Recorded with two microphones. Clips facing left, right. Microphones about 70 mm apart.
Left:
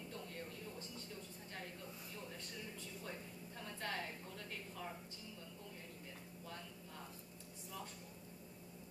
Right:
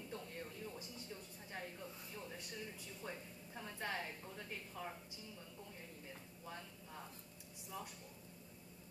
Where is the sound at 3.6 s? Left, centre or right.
Centre.